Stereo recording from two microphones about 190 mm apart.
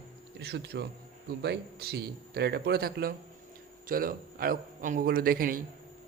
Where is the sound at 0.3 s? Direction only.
65° right (ahead or behind).